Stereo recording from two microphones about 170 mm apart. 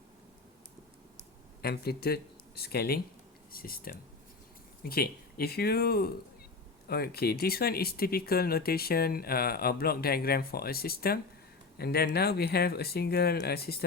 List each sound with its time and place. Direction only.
1.6 s speech: 65° left (ahead or behind)